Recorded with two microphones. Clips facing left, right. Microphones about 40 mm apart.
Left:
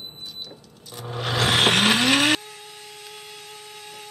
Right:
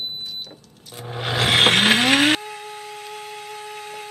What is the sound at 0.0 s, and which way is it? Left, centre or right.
Vehicle, right.